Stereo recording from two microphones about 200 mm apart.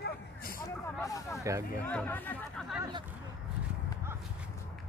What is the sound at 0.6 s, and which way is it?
Speech, 15° left (ahead or behind).